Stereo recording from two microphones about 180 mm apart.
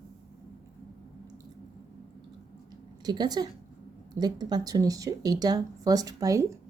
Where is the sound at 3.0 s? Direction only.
25° right (ahead or behind).